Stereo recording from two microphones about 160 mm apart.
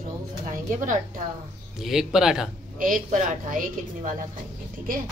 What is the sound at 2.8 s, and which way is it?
A woman's voice, 55° right (ahead or behind).